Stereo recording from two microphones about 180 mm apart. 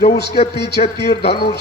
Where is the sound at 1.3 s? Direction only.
65° left (ahead or behind).